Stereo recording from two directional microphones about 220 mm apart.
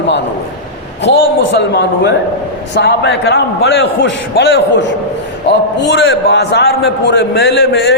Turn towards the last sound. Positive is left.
turn(degrees=45)  # may be behind; listen again after turning